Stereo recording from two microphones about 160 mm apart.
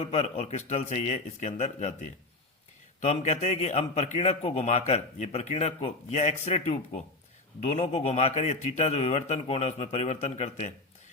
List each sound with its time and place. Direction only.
0.0 s a man's voice: 40° left (ahead or behind)
3.0 s a man's voice: 45° left (ahead or behind)